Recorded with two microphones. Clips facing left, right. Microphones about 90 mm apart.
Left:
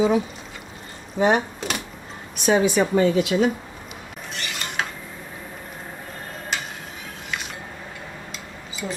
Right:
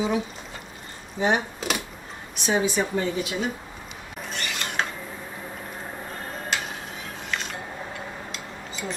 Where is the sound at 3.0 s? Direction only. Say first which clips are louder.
Left 8 dB; 80° left.